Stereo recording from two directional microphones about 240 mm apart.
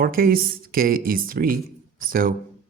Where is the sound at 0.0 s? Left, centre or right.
Right.